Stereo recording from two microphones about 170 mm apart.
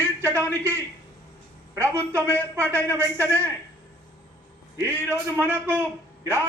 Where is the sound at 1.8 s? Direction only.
15° right (ahead or behind).